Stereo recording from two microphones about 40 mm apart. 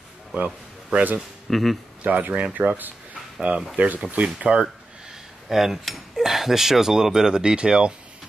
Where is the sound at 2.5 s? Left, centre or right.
Right.